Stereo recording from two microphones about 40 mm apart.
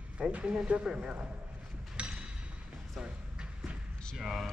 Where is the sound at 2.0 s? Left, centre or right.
Right.